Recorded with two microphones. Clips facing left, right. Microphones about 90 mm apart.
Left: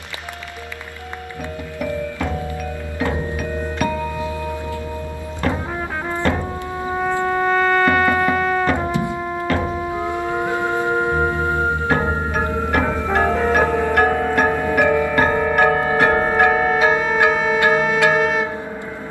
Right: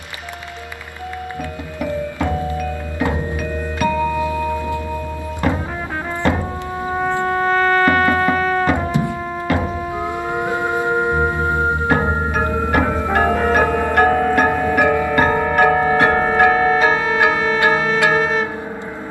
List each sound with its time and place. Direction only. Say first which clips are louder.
1.9 s music: right 3 dB; 15° right (ahead or behind)
4.2 s music: right 5 dB; 20° left (ahead or behind)
5.4 s music: right 1 dB; 10° right (ahead or behind)
7.2 s music: right 1 dB; centre (ahead or behind)
9.9 s music: right 1 dB; 20° right (ahead or behind)
14.1 s music: right 2 dB; 5° right (ahead or behind)